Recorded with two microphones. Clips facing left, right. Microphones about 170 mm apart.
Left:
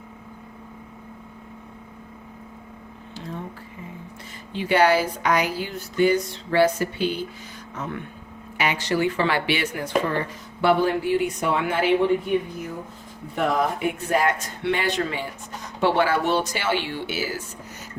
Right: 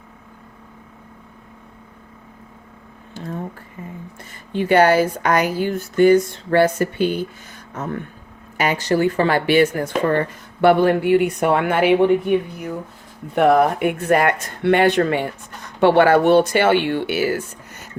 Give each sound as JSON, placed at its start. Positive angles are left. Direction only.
{"t": 3.2, "sound": "a sound", "side_deg": -50}
{"t": 4.5, "sound": "speech", "side_deg": -50}
{"t": 13.3, "sound": "speech", "side_deg": -65}